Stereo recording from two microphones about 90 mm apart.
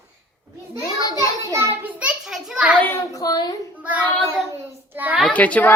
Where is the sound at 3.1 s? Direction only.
50° left (ahead or behind).